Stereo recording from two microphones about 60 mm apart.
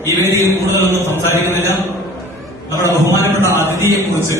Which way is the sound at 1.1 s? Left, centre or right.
Left.